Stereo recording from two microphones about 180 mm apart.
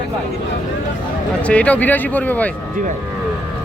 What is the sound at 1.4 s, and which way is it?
Speech, 5° left (ahead or behind).